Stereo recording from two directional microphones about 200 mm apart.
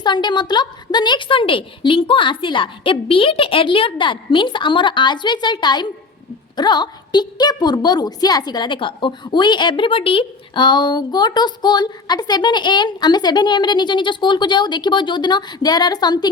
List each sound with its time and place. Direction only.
0.0 s a woman's voice: 20° left (ahead or behind)